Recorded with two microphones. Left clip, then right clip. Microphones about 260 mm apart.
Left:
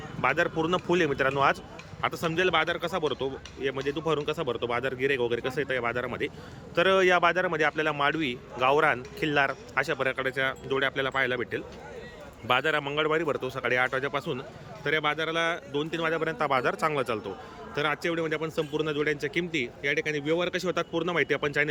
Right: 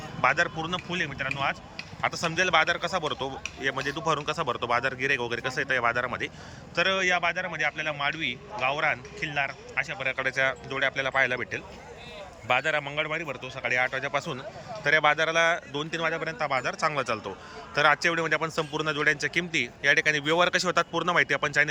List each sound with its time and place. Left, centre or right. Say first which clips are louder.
0.2 s a man's voice: right 1 dB; centre